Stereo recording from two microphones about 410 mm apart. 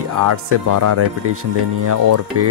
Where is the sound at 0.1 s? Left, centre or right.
Right.